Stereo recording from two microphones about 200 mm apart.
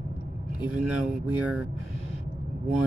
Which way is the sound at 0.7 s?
5° right (ahead or behind).